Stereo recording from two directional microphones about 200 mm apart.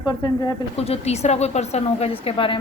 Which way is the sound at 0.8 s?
30° left (ahead or behind).